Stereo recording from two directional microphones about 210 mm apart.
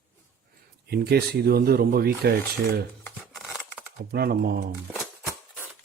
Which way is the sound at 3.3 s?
Centre (ahead or behind).